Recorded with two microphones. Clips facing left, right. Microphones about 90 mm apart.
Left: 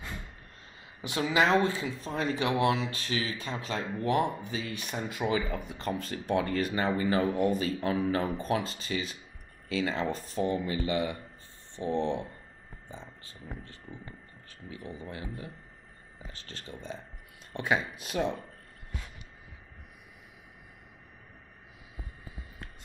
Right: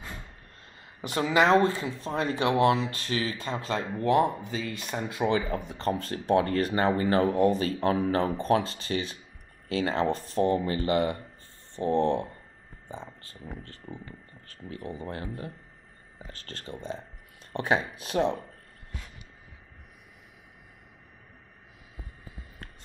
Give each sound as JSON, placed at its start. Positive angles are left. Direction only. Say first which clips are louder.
{"t": 0.7, "sound": "speech", "louder": "right 3 dB", "side_deg": -40}
{"t": 14.7, "sound": "speech", "louder": "right 5 dB", "side_deg": -45}